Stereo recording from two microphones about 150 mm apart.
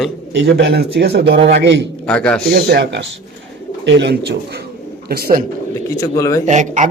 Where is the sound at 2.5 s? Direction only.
90° right.